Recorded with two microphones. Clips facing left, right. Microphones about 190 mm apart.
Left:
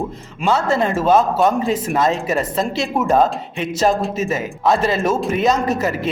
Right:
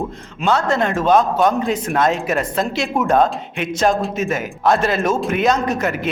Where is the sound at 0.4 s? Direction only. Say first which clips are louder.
Even; 5° left (ahead or behind).